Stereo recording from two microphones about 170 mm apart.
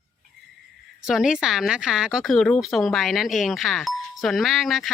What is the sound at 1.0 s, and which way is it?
Speech, centre (ahead or behind).